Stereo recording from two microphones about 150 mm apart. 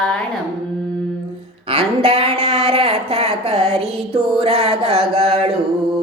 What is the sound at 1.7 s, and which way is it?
Speech, 40° right (ahead or behind).